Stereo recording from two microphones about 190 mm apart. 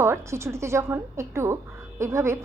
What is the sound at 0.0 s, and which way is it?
A woman's voice, 15° right (ahead or behind).